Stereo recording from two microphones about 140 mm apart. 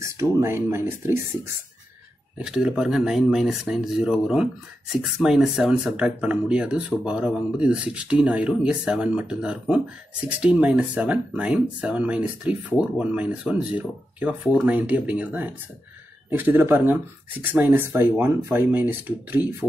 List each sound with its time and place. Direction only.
0.0 s speech: 20° right (ahead or behind)
2.3 s speech: 5° right (ahead or behind)